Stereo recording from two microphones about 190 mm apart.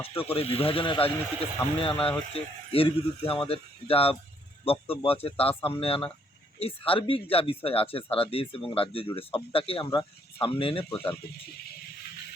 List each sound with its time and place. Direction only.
0.3 s speech: 30° left (ahead or behind)
10.8 s speech: 10° left (ahead or behind)